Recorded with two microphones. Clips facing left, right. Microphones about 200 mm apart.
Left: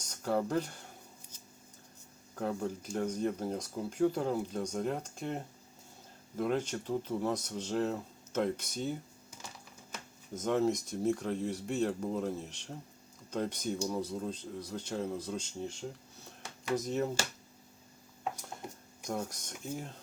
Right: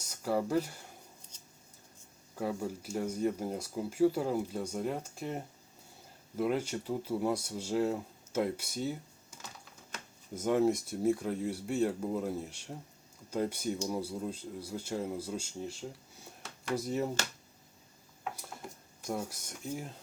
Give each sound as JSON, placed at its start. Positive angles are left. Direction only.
{"t": 0.0, "sound": "speech", "side_deg": -10}
{"t": 2.3, "sound": "speech", "side_deg": -10}
{"t": 10.3, "sound": "speech", "side_deg": -10}
{"t": 16.7, "sound": "speech", "side_deg": -10}
{"t": 18.6, "sound": "a sound", "side_deg": 20}
{"t": 19.0, "sound": "speech", "side_deg": -5}